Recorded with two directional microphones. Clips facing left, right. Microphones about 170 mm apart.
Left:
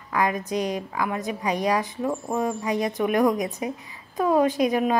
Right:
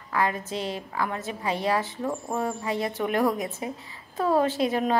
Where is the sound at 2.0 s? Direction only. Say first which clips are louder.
Left 3 dB; centre (ahead or behind).